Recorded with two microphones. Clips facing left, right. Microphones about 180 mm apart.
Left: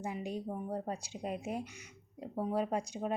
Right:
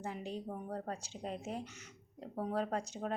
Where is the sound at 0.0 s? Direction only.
15° left (ahead or behind).